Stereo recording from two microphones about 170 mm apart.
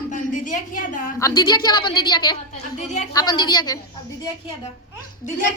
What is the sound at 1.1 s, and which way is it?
A woman's voice, 20° left (ahead or behind).